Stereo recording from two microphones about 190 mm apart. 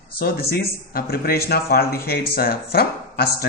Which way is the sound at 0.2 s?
50° left (ahead or behind).